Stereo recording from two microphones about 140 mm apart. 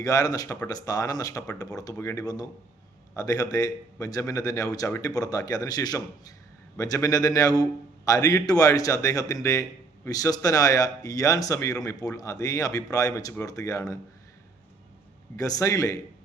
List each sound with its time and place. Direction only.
0.0 s a man's voice: 25° left (ahead or behind)
15.4 s a man's voice: 25° left (ahead or behind)